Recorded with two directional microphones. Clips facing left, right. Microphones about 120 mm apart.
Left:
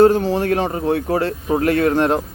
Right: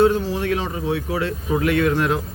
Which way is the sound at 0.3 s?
45° left (ahead or behind).